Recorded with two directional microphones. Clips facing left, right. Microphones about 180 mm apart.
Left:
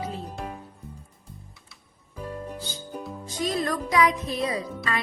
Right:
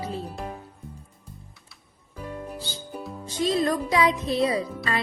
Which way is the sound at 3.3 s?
25° right (ahead or behind).